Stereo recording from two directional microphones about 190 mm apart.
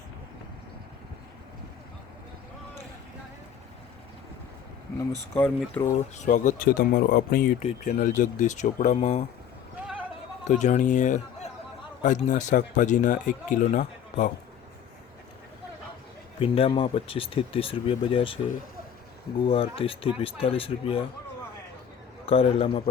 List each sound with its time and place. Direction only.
5.3 s speech: 10° left (ahead or behind)
5.8 s speech: 35° left (ahead or behind)
10.5 s speech: 40° left (ahead or behind)
16.4 s speech: 30° left (ahead or behind)
19.5 s speech: 30° left (ahead or behind)
22.3 s speech: 30° left (ahead or behind)